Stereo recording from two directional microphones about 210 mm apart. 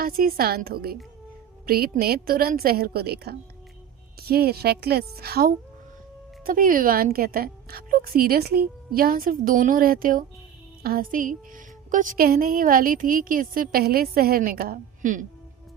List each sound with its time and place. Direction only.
0.0 s a woman's voice: 45° right (ahead or behind)